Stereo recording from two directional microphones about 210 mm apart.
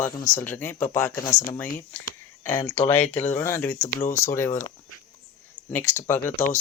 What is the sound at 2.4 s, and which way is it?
Speech, 15° left (ahead or behind).